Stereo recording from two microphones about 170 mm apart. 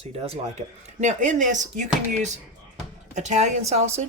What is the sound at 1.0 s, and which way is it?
Speech, 45° right (ahead or behind).